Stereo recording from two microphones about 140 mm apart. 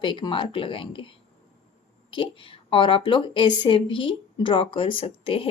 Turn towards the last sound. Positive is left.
turn(degrees=40)  # may be behind; listen again after turning